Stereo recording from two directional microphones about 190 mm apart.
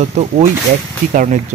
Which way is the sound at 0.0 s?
35° right (ahead or behind).